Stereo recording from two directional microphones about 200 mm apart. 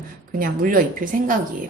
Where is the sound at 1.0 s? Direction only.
45° right (ahead or behind).